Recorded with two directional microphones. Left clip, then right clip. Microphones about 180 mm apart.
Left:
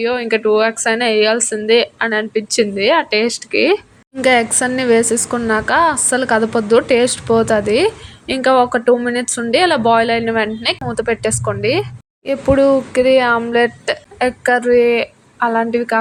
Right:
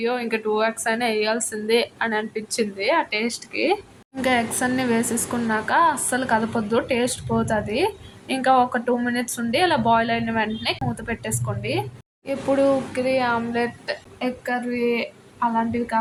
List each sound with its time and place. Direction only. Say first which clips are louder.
0.0 s a woman's voice: left 8 dB; 25° left (ahead or behind)
14.2 s a woman's voice: left 12 dB; 50° left (ahead or behind)